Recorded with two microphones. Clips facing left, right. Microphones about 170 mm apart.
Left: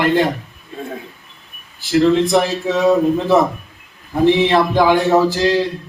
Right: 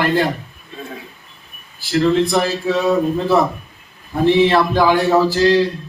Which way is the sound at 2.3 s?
20° left (ahead or behind).